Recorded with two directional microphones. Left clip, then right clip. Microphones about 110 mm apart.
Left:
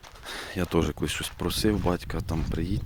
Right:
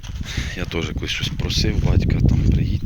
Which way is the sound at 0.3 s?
85° left.